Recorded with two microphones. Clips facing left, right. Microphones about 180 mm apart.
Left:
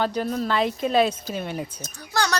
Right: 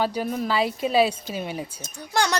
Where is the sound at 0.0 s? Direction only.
10° right (ahead or behind).